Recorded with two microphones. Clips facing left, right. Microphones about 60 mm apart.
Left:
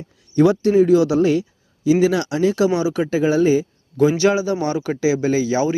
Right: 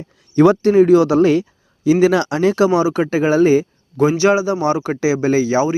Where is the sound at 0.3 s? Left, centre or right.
Right.